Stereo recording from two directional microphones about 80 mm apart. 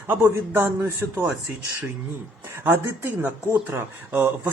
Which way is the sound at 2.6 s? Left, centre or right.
Right.